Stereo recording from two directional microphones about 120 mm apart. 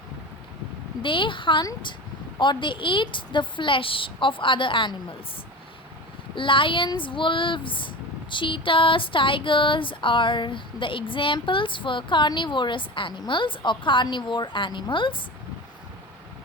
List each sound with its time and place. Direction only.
1.0 s speech: 45° left (ahead or behind)
6.3 s speech: 45° left (ahead or behind)